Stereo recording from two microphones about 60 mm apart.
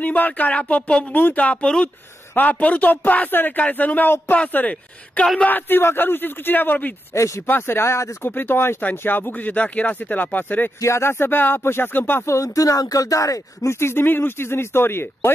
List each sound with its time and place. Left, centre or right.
0.0 s speech: left
7.2 s speech: left
7.4 s speech: left
8.3 s speech: left
10.8 s speech: left
12.3 s speech: left
13.7 s speech: left